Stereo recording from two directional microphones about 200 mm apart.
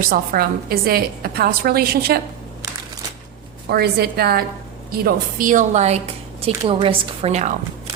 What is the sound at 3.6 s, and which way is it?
A woman's voice, 50° right (ahead or behind).